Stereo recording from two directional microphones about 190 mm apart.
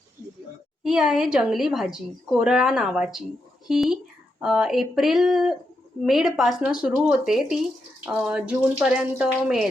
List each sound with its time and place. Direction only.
0.9 s a woman's voice: centre (ahead or behind)